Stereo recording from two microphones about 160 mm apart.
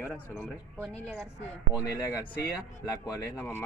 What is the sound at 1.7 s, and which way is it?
Speech, 20° left (ahead or behind).